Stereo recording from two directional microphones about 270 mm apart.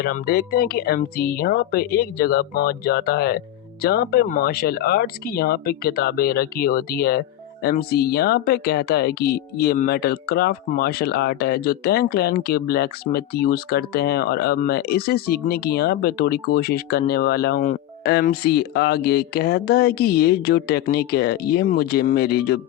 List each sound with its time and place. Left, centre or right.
0.0 s speech: left